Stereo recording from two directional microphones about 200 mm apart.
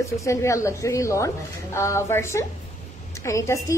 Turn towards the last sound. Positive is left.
turn(degrees=15)  # may be behind; listen again after turning